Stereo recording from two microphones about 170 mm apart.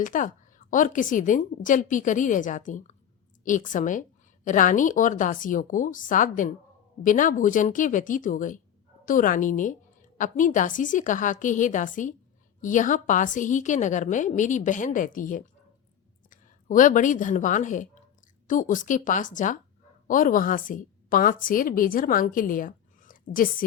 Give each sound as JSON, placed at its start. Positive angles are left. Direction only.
{"t": 0.0, "sound": "a woman's voice", "side_deg": 50}